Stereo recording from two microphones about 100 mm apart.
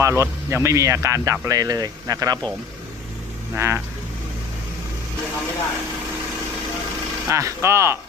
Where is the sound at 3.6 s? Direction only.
25° right (ahead or behind).